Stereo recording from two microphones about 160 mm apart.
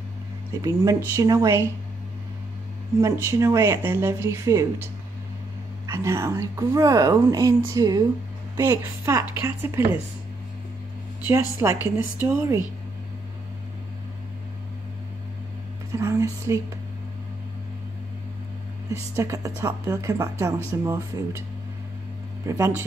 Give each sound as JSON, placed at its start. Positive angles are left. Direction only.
{"t": 0.6, "sound": "speech", "side_deg": -20}
{"t": 3.0, "sound": "speech", "side_deg": -20}
{"t": 5.9, "sound": "speech", "side_deg": -15}
{"t": 11.2, "sound": "speech", "side_deg": -15}
{"t": 15.9, "sound": "speech", "side_deg": -20}
{"t": 18.9, "sound": "speech", "side_deg": -20}
{"t": 22.5, "sound": "speech", "side_deg": -15}